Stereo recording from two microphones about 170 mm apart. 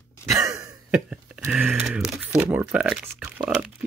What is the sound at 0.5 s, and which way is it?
Cough, 20° right (ahead or behind).